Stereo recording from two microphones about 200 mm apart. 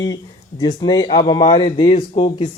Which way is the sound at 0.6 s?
20° left (ahead or behind).